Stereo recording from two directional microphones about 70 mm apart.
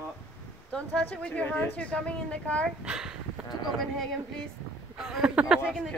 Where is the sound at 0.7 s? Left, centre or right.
Centre.